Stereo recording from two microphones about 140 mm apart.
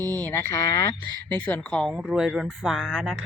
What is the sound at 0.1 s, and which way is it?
Speech, 10° left (ahead or behind).